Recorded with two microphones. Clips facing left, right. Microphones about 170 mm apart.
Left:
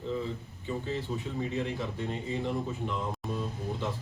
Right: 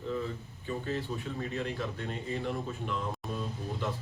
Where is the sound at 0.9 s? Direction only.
20° left (ahead or behind).